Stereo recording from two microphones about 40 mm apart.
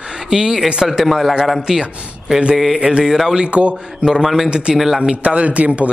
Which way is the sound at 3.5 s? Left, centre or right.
Right.